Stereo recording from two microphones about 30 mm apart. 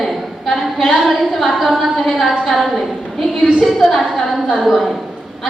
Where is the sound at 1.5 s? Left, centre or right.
Centre.